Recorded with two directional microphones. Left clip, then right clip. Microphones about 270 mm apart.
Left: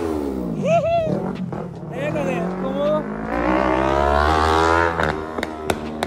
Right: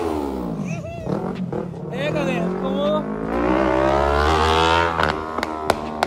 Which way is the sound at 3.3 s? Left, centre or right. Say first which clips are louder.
Even; left.